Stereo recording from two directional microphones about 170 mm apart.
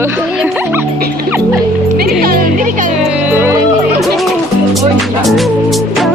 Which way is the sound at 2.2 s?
60° right (ahead or behind).